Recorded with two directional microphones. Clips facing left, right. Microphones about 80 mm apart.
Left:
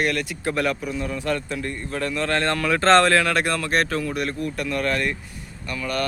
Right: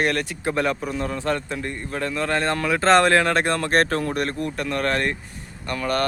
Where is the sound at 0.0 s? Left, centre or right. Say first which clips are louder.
Right 1 dB; right.